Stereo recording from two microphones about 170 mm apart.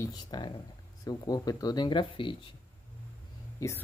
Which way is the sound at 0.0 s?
25° left (ahead or behind).